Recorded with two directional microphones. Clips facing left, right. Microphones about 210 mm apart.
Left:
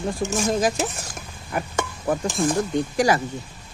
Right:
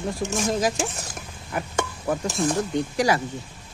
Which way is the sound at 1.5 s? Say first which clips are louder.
Left 1 dB; 50° left (ahead or behind).